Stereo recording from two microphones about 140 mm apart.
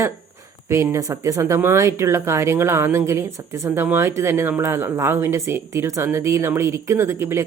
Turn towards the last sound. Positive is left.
turn(degrees=-20)  # may be behind; listen again after turning